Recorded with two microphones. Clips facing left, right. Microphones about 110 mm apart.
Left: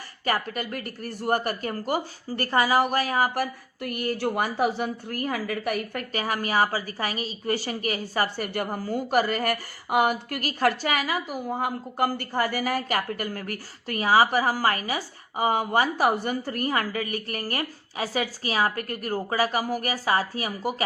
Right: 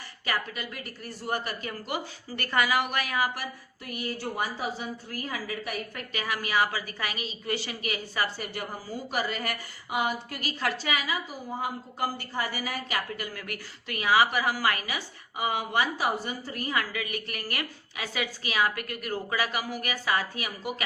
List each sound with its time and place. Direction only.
0.3 s a woman's voice: 50° left (ahead or behind)
3.3 s a woman's voice: 50° left (ahead or behind)
6.1 s a woman's voice: 40° left (ahead or behind)